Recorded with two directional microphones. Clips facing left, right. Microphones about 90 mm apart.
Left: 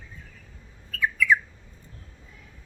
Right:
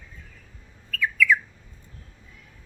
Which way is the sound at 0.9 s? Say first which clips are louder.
Even; 30° left (ahead or behind).